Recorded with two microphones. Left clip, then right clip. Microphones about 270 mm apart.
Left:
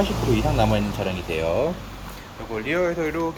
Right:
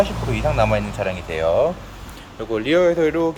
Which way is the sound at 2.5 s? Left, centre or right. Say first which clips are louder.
Right 7 dB; right.